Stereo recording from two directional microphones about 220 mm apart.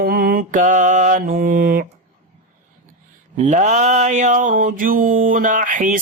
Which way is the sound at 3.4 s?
30° right (ahead or behind).